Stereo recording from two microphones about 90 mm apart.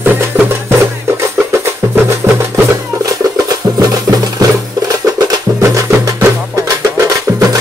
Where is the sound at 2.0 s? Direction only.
35° right (ahead or behind).